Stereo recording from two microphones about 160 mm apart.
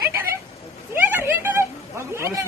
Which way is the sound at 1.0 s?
15° right (ahead or behind).